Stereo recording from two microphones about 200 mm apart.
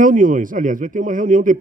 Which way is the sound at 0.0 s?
40° right (ahead or behind).